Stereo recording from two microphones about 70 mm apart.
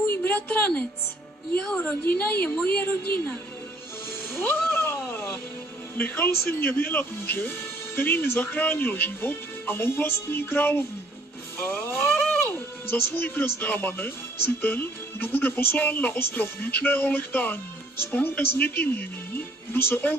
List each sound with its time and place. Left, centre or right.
0.0 s a sound: left
1.6 s a woman's voice: centre
2.0 s speech: left
4.4 s music: left
5.9 s speech: left
11.6 s music: left
12.4 s speech: left